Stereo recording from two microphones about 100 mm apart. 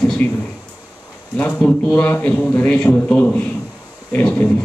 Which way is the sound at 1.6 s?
10° left (ahead or behind).